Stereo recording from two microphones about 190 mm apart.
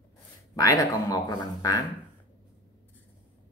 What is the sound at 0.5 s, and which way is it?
Speech, 20° left (ahead or behind).